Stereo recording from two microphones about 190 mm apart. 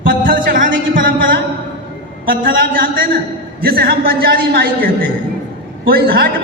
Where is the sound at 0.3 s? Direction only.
50° right (ahead or behind).